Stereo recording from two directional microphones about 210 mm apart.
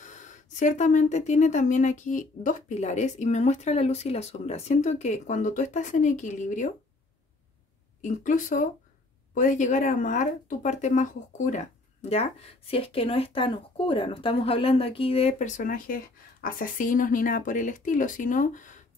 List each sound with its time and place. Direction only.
0.0 s speech: 35° left (ahead or behind)
8.0 s speech: 35° left (ahead or behind)